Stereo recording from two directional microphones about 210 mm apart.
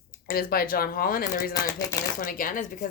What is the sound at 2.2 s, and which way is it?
Speech, 40° left (ahead or behind).